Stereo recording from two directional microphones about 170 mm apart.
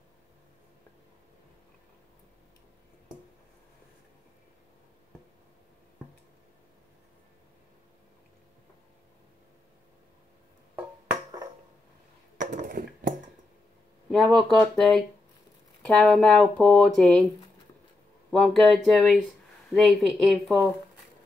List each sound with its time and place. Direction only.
12.4 s a sound: 50° right (ahead or behind)
14.1 s speech: centre (ahead or behind)
18.3 s speech: centre (ahead or behind)